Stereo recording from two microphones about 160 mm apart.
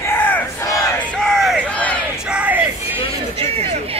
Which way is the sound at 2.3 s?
10° right (ahead or behind).